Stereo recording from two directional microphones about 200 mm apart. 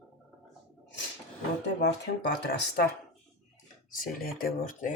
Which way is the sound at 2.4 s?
55° left (ahead or behind).